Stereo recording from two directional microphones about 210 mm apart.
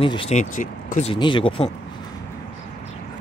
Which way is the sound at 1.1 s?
25° left (ahead or behind).